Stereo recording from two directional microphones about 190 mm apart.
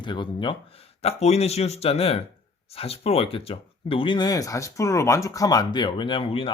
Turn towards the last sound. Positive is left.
turn(degrees=30)  # may be behind; listen again after turning